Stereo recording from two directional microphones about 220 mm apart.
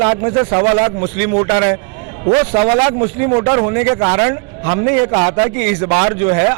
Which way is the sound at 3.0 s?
25° right (ahead or behind).